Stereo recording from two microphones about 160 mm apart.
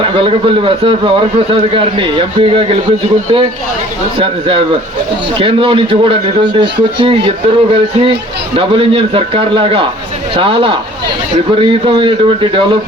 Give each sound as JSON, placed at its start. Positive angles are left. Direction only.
{"t": 0.0, "sound": "a man's voice", "side_deg": -35}
{"t": 4.2, "sound": "a man's voice", "side_deg": -35}